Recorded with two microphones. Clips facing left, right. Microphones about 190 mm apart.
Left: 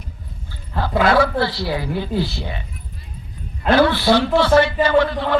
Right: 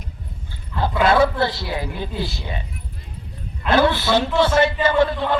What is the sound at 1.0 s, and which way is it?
A woman's voice, 25° right (ahead or behind).